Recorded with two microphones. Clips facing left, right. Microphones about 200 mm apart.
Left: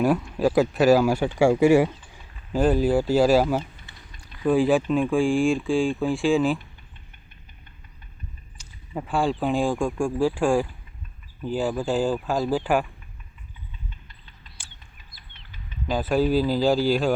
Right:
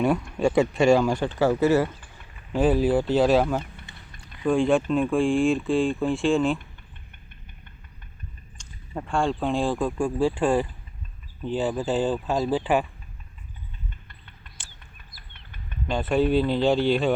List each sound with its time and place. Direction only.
0.0 s speech: 5° left (ahead or behind)
2.5 s speech: centre (ahead or behind)
4.2 s a sound: 5° left (ahead or behind)
4.9 s speech: centre (ahead or behind)
8.5 s speech: 5° left (ahead or behind)
14.1 s a sound: 60° right (ahead or behind)
15.9 s speech: centre (ahead or behind)